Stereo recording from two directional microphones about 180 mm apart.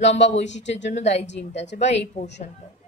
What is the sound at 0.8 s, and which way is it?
Speech, 40° left (ahead or behind).